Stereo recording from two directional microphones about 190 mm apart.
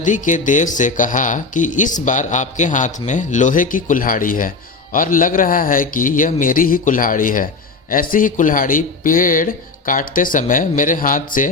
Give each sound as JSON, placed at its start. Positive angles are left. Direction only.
{"t": 0.0, "sound": "speech", "side_deg": 40}